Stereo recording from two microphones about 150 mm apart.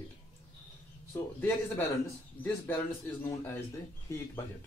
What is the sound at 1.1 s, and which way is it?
Speech, 15° left (ahead or behind).